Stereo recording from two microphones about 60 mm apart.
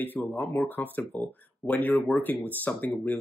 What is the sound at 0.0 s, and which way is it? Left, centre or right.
Speech, left.